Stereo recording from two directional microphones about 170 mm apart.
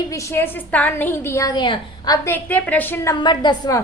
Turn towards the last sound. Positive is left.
turn(degrees=25)  # may be behind; listen again after turning